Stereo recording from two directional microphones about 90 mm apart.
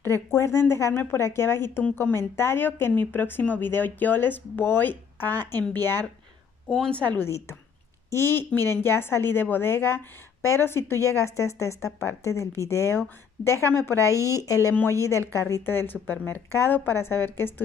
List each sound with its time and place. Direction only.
0.3 s speech: 30° left (ahead or behind)
1.9 s a woman's voice: 15° left (ahead or behind)
2.1 s speech: 25° left (ahead or behind)
6.7 s a woman's voice: 10° left (ahead or behind)
7.2 s a woman's voice: 30° left (ahead or behind)
14.1 s speech: 35° right (ahead or behind)
14.4 s a woman's voice: 40° left (ahead or behind)
14.7 s speech: 25° left (ahead or behind)